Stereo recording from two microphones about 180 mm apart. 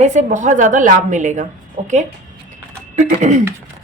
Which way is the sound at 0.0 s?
40° right (ahead or behind).